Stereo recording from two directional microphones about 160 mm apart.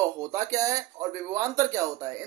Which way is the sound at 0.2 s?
20° right (ahead or behind).